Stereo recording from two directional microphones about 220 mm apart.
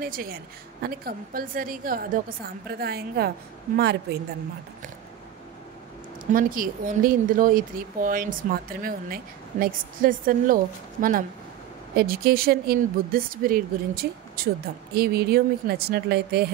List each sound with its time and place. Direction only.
0.0 s speech: 40° right (ahead or behind)
6.3 s speech: 40° right (ahead or behind)